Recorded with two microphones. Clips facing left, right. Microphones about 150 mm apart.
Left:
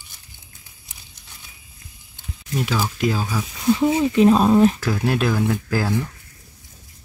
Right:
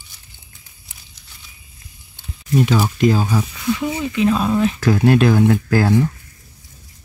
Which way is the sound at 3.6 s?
35° left (ahead or behind).